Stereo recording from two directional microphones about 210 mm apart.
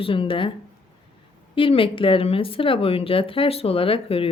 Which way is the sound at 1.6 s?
25° left (ahead or behind).